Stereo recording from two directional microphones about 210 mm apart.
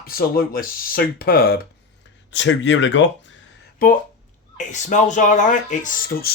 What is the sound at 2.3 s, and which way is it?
Speech, 60° left (ahead or behind).